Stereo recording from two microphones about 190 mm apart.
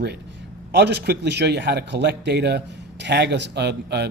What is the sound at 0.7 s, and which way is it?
A man's voice, 65° right (ahead or behind).